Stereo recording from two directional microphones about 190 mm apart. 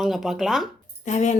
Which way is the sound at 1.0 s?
40° left (ahead or behind).